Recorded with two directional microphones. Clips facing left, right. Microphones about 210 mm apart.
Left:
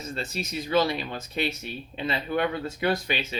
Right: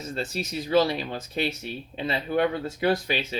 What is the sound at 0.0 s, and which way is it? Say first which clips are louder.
Speech: right 2 dB; 35° right (ahead or behind).